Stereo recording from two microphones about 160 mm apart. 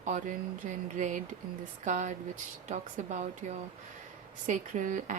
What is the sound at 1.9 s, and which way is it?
Speech, 50° right (ahead or behind).